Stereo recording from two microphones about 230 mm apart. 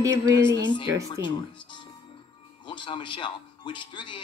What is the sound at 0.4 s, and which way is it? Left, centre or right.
Speech, centre.